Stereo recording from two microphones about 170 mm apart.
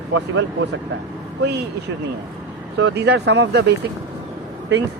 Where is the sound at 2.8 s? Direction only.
85° right.